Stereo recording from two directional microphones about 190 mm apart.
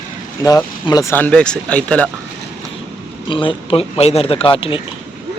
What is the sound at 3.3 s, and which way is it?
Speech, 25° left (ahead or behind).